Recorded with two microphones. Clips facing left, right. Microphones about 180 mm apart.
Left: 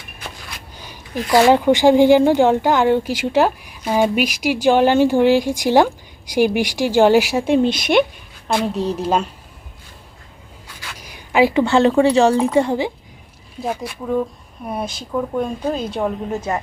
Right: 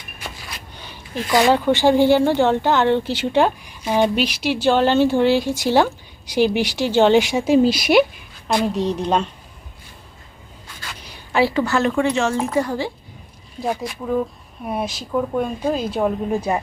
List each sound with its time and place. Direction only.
1.3 s speech: 15° left (ahead or behind)
10.8 s writing: 10° left (ahead or behind)
11.6 s speech: 30° left (ahead or behind)
12.5 s a child's voice: 20° left (ahead or behind)
13.6 s speech: centre (ahead or behind)